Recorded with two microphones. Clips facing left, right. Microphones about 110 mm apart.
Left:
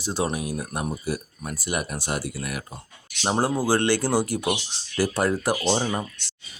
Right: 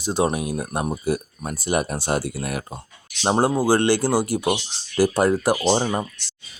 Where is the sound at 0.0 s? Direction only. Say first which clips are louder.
Right 5 dB; 20° right (ahead or behind).